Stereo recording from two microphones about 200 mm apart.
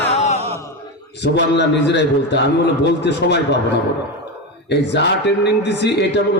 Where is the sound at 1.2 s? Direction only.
60° left (ahead or behind).